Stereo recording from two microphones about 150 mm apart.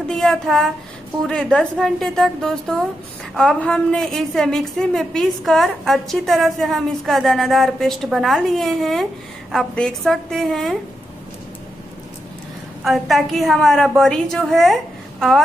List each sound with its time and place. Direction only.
0.1 s a woman's voice: 5° left (ahead or behind)
12.8 s a woman's voice: centre (ahead or behind)